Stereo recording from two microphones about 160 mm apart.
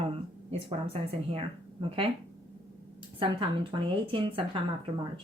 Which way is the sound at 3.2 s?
30° right (ahead or behind).